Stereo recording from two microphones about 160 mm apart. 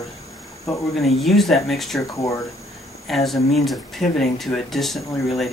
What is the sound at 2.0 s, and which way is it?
Speech, 20° left (ahead or behind).